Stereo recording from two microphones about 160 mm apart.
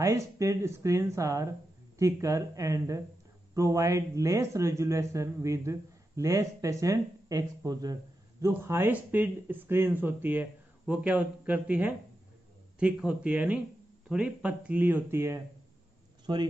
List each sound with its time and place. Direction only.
0.0 s speech: 20° right (ahead or behind)
16.3 s speech: 30° right (ahead or behind)